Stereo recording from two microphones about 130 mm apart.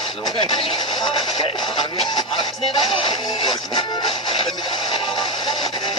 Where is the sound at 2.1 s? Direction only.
35° left (ahead or behind).